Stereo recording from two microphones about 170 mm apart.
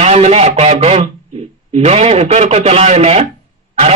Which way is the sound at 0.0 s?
40° right (ahead or behind).